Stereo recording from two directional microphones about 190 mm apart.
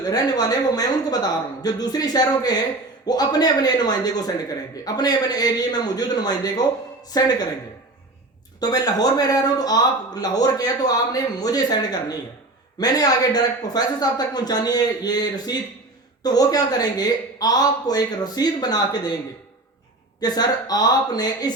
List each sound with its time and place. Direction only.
0.0 s a man's voice: 20° left (ahead or behind)
8.6 s a man's voice: 20° left (ahead or behind)
20.2 s a man's voice: 20° left (ahead or behind)